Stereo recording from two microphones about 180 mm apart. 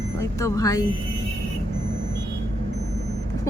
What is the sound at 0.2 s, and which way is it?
Speech, 15° left (ahead or behind).